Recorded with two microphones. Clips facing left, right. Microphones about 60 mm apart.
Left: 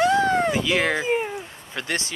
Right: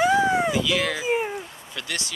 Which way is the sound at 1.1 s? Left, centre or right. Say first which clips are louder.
Even; centre.